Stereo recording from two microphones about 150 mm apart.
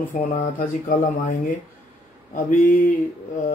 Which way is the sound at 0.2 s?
70° left (ahead or behind).